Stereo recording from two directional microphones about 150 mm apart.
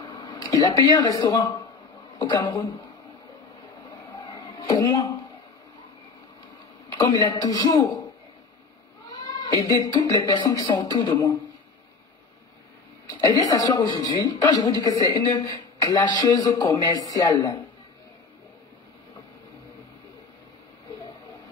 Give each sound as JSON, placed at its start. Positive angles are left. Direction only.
{"t": 0.0, "sound": "speech", "side_deg": 30}
{"t": 4.1, "sound": "a sound", "side_deg": 30}
{"t": 6.9, "sound": "a sound", "side_deg": 25}
{"t": 7.2, "sound": "a woman's voice", "side_deg": 25}
{"t": 9.4, "sound": "a woman's voice", "side_deg": 25}
{"t": 13.3, "sound": "a woman's voice", "side_deg": 25}